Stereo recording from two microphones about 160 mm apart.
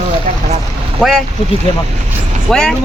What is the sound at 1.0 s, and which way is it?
Speech, 5° right (ahead or behind).